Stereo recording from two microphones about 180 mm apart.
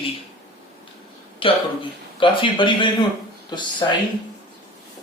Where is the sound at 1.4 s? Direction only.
30° left (ahead or behind).